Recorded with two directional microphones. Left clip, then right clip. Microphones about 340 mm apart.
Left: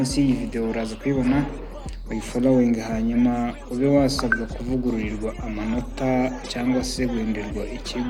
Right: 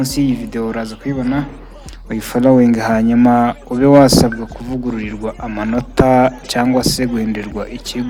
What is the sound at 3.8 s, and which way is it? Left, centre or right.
Speech, right.